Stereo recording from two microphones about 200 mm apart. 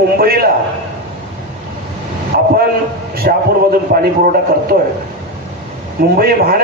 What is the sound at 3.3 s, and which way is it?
A man's voice, 45° right (ahead or behind).